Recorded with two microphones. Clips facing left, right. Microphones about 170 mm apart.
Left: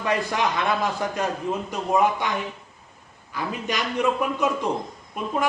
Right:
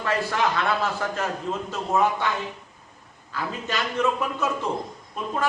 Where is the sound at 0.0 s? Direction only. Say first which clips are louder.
Even; 15° left (ahead or behind).